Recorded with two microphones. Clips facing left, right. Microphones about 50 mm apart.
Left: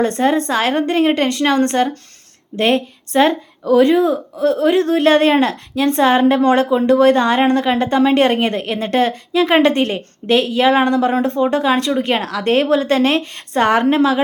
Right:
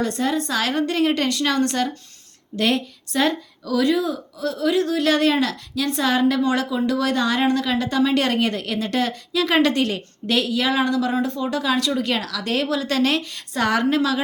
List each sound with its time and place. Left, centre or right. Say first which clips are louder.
0.0 s speech: left 7 dB; left